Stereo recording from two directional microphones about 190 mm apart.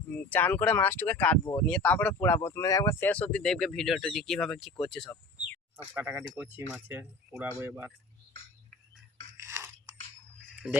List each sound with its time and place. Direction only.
0.1 s speech: 10° left (ahead or behind)
5.7 s speech: 10° right (ahead or behind)
10.6 s speech: centre (ahead or behind)